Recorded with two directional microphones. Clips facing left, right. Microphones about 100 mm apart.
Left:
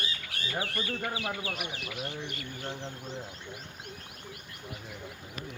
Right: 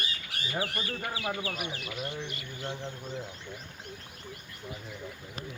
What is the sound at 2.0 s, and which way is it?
Speech, 55° left (ahead or behind).